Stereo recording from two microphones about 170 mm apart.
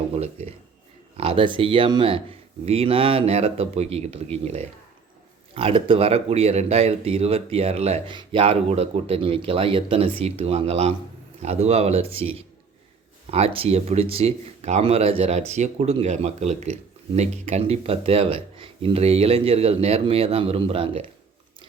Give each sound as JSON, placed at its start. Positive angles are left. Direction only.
{"t": 1.1, "sound": "speech", "side_deg": -30}